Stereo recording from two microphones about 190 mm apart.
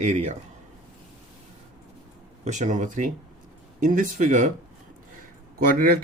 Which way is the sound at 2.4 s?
40° right (ahead or behind).